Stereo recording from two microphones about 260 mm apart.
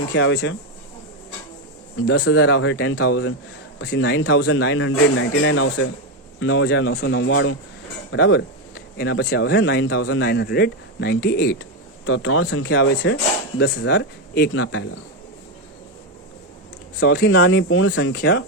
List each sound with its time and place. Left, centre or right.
0.1 s speech: left
2.2 s speech: left
3.8 s speech: left
10.0 s a man's voice: left
10.2 s speech: left
17.0 s speech: left
18.1 s speech: left